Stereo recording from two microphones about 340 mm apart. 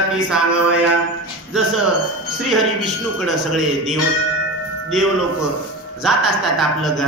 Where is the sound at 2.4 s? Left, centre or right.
Centre.